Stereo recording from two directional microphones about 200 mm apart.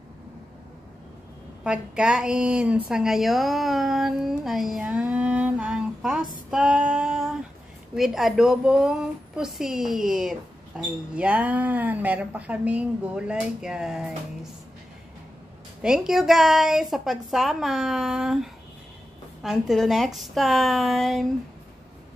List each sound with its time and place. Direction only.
1.6 s a woman's voice: 5° right (ahead or behind)
6.5 s female singing: 5° right (ahead or behind)
7.9 s a woman's voice: centre (ahead or behind)
15.8 s a woman's voice: 5° right (ahead or behind)